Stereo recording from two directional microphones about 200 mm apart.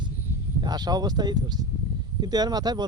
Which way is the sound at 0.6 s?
20° right (ahead or behind).